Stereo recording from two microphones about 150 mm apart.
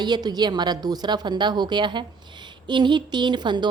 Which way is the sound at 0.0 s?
30° right (ahead or behind).